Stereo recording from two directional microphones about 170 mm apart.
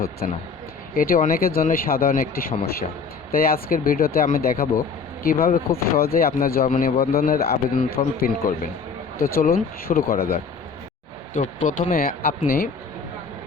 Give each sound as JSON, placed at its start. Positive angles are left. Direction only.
{"t": 0.2, "sound": "speech", "side_deg": 55}
{"t": 11.3, "sound": "speech", "side_deg": 50}